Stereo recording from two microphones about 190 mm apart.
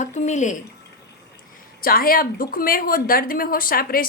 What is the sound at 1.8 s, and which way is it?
A woman's voice, 50° left (ahead or behind).